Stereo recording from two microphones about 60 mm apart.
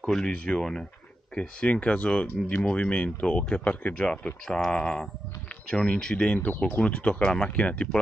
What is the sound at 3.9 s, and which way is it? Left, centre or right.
Speech, centre.